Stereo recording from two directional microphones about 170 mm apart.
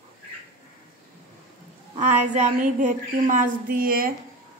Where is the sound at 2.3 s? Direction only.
50° right (ahead or behind).